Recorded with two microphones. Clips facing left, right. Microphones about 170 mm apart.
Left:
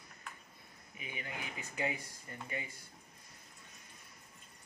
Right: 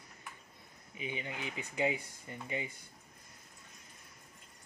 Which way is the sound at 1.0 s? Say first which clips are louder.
Right 5 dB; 25° right (ahead or behind).